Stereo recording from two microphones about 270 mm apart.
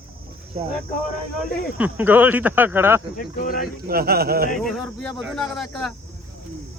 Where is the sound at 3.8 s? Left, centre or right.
Right.